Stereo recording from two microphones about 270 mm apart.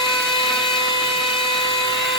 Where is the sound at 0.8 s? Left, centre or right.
Centre.